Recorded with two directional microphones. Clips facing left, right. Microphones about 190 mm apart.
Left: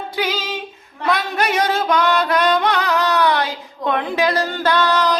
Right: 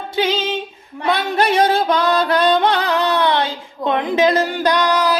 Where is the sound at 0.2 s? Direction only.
25° right (ahead or behind).